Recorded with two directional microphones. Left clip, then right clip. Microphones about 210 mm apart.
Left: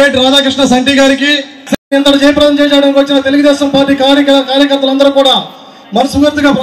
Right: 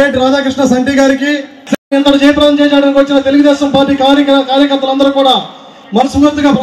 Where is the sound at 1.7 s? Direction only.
55° left (ahead or behind).